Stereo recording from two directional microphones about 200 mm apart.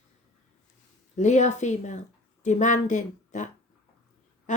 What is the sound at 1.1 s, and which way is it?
Speech, 35° left (ahead or behind).